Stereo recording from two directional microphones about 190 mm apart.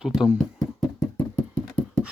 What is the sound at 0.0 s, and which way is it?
Speech, 5° right (ahead or behind).